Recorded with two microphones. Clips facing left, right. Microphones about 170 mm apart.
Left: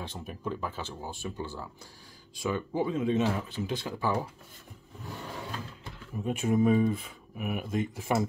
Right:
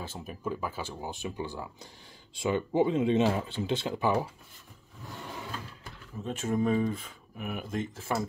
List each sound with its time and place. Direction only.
0.0 s speech: centre (ahead or behind); by 4.1 s 25° right (ahead or behind)
6.2 s speech: 10° left (ahead or behind)